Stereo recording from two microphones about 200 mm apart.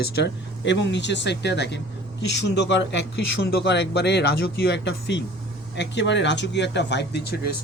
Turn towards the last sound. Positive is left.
turn(degrees=55)  # may be behind; listen again after turning